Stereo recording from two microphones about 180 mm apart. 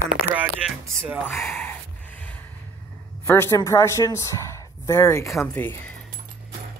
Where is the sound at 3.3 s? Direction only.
15° left (ahead or behind).